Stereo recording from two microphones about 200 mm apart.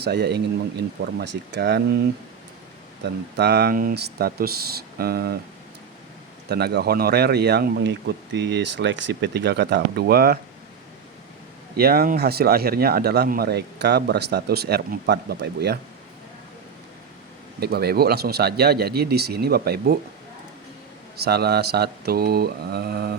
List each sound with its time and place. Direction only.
0.0 s speech: 55° right (ahead or behind)
3.0 s speech: 55° right (ahead or behind)
6.5 s speech: 55° right (ahead or behind)
11.8 s speech: 50° right (ahead or behind)
17.6 s speech: 50° right (ahead or behind)
21.2 s speech: 50° right (ahead or behind)